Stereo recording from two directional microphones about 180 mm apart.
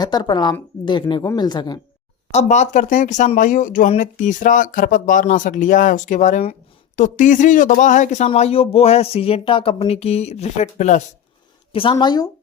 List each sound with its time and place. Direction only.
0.0 s speech: 25° left (ahead or behind)
2.3 s speech: 40° left (ahead or behind)
11.7 s speech: 30° left (ahead or behind)